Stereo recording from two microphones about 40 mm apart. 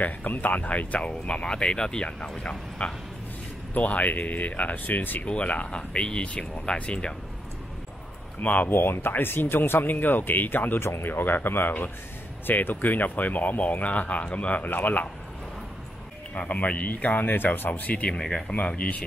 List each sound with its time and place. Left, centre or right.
0.0 s speech: left
3.7 s speech: left
5.2 s speech: left
6.2 s speech: left
6.6 s speech: left
8.4 s speech: left
8.6 s speech: left
9.1 s speech: left
10.8 s speech: left
14.6 s speech: left
16.3 s speech: left
17.6 s speech: left
18.1 s speech: left
18.5 s speech: left